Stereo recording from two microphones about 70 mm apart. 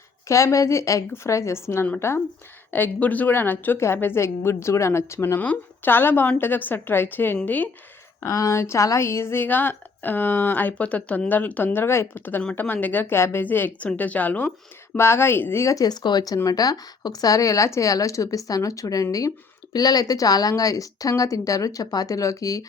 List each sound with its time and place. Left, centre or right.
0.3 s a woman's voice: left
2.7 s a woman's voice: left
5.4 s a woman's voice: left
8.2 s a woman's voice: left
14.9 s a woman's voice: left
15.6 s speech: left
15.9 s a woman's voice: left
19.7 s a woman's voice: left